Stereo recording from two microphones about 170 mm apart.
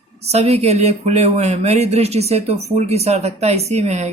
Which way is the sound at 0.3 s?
40° right (ahead or behind).